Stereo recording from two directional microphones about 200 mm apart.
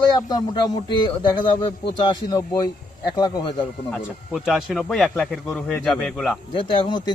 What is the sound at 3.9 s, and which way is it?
A man's voice, centre (ahead or behind).